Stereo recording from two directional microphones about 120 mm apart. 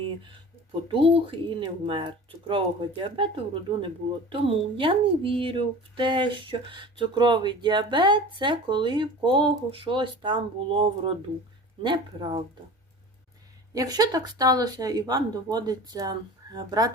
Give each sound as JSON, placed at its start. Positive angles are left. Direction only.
{"t": 0.9, "sound": "speech", "side_deg": -50}
{"t": 13.7, "sound": "speech", "side_deg": -30}